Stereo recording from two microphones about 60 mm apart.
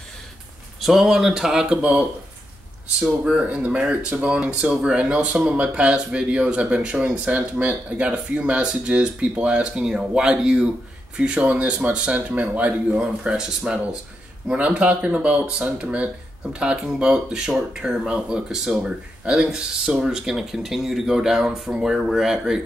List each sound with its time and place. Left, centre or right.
0.7 s speech: centre; by 13.0 s right
13.0 s speech: centre
14.5 s speech: right